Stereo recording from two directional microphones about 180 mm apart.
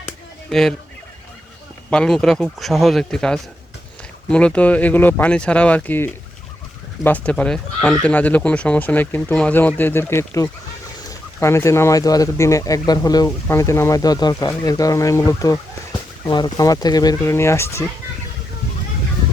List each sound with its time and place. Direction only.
1.9 s speech: 5° left (ahead or behind)